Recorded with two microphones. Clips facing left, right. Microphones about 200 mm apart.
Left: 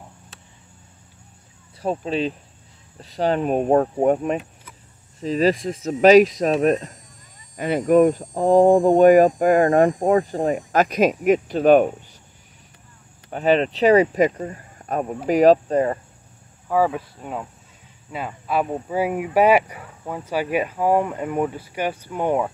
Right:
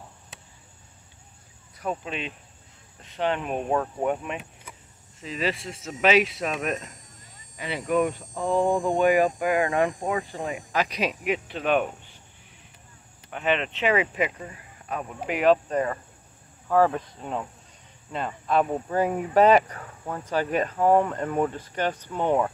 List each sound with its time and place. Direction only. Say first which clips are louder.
1.8 s speech: left 8 dB; 30° left (ahead or behind)
7.5 s speech: left 9 dB; 50° left (ahead or behind)
13.3 s speech: left 8 dB; 35° left (ahead or behind)
16.6 s speech: left 1 dB; 10° left (ahead or behind)